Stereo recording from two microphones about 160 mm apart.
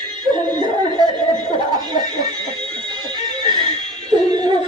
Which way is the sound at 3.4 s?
25° right (ahead or behind).